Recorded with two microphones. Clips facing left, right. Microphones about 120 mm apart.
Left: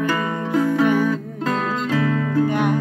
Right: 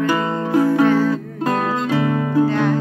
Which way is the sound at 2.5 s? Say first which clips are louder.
Right 2 dB; 15° left (ahead or behind).